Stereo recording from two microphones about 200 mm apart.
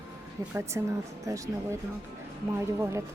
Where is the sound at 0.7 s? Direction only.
15° right (ahead or behind).